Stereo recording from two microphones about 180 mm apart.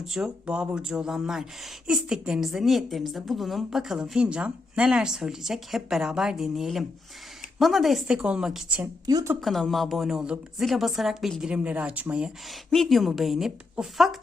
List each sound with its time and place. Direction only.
0.0 s a woman's voice: 5° right (ahead or behind)
9.0 s speech: 20° right (ahead or behind)
9.4 s a woman's voice: centre (ahead or behind)